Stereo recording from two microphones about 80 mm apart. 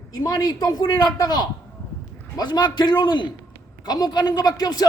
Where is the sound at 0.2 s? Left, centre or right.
Left.